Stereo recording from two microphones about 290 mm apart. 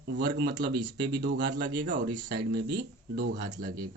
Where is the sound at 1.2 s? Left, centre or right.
Right.